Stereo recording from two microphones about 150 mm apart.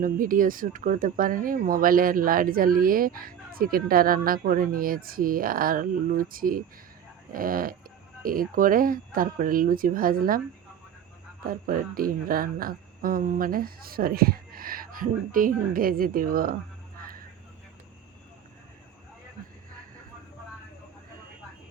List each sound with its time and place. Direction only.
0.0 s speech: 65° right (ahead or behind)
11.4 s speech: 70° right (ahead or behind)